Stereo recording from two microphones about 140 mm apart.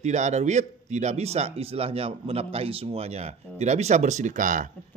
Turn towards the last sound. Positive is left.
turn(degrees=-65)  # may be behind; listen again after turning